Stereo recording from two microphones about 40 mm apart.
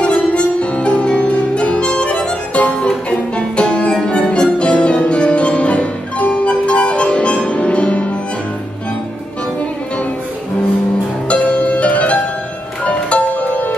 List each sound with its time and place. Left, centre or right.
0.0 s music: left
11.2 s music: left